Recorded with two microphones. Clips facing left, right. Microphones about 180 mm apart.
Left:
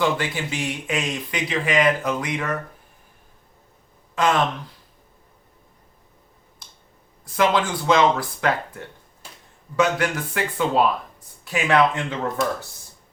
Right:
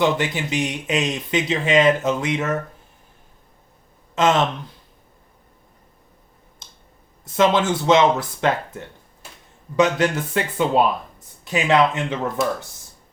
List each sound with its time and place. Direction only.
0.0 s speech: 20° right (ahead or behind)
4.1 s speech: 25° right (ahead or behind)
6.6 s a sound: 20° right (ahead or behind)
7.3 s speech: 25° right (ahead or behind)